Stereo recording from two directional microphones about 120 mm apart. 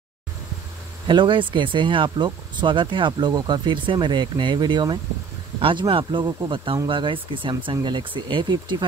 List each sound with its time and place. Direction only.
1.0 s speech: 40° right (ahead or behind)